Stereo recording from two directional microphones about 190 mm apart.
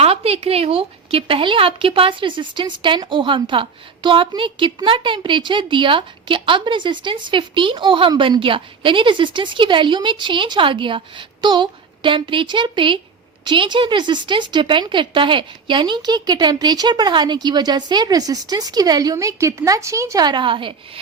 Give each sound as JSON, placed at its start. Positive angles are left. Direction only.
{"t": 0.0, "sound": "speech", "side_deg": -30}